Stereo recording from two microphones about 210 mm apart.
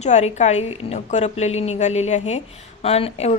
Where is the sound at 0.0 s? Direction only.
35° left (ahead or behind).